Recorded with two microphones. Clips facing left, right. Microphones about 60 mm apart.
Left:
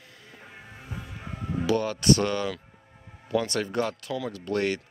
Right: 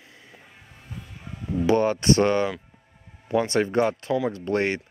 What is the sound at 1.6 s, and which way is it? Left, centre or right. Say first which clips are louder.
Speech: right 5 dB; right.